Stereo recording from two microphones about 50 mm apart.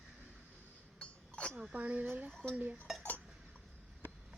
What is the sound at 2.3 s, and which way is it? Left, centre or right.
Dishes, centre.